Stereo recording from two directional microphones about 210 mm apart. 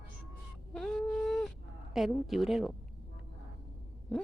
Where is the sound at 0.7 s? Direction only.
Centre (ahead or behind).